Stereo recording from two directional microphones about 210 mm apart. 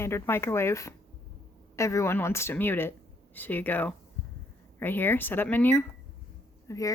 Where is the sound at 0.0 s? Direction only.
10° left (ahead or behind).